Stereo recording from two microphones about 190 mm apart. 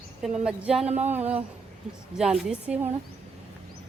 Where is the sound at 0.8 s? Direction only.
35° right (ahead or behind).